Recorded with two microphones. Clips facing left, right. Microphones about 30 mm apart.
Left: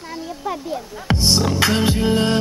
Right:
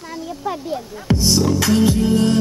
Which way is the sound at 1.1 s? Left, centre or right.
Left.